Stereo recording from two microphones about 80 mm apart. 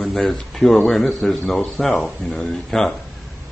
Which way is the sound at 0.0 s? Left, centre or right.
Centre.